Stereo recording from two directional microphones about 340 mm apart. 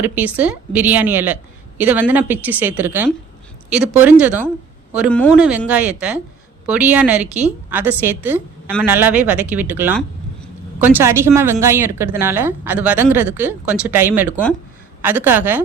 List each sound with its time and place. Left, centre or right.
0.0 s a woman's voice: centre